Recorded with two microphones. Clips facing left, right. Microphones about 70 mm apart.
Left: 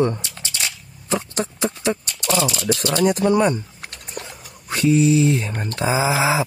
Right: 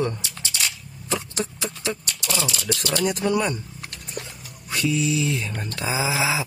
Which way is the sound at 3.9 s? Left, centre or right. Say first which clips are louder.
Right 2 dB; left.